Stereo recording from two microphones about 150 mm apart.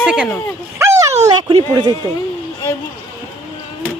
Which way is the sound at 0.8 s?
20° right (ahead or behind).